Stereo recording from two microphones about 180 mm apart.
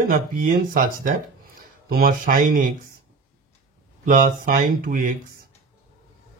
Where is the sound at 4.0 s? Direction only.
50° right (ahead or behind).